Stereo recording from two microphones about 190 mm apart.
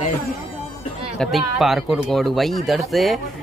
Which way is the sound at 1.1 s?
Centre (ahead or behind).